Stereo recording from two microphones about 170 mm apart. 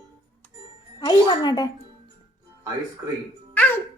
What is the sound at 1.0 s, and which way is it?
Speech, 25° left (ahead or behind).